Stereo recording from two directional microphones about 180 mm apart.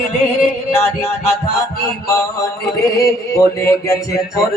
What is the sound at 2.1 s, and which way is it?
Speech, 15° left (ahead or behind).